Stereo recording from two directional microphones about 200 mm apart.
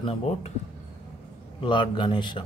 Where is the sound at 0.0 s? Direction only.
30° left (ahead or behind).